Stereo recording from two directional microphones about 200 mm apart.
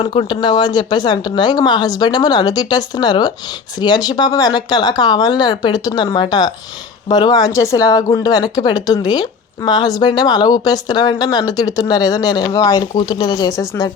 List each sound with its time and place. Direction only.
0.0 s speech: 25° left (ahead or behind)